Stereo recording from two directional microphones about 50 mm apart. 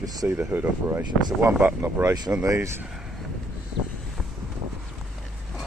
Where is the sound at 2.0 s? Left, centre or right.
Right.